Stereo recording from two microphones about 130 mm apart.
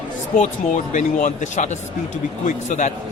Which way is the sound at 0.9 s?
70° left (ahead or behind).